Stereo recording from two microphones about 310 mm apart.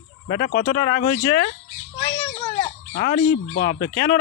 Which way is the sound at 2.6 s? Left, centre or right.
Left.